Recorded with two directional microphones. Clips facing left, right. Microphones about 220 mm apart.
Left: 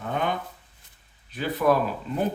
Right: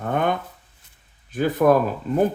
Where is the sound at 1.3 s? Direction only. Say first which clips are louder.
Right 5 dB; 50° right (ahead or behind).